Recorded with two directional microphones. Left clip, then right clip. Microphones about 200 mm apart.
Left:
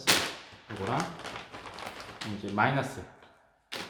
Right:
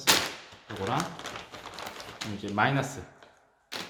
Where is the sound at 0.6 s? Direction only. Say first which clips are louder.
Right 2 dB; 30° right (ahead or behind).